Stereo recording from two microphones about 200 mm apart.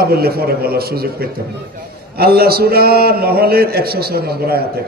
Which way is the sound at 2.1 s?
50° right (ahead or behind).